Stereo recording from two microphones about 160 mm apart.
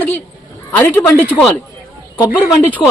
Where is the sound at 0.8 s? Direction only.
15° left (ahead or behind).